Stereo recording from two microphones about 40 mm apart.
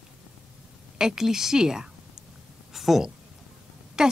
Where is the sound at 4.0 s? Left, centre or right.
Centre.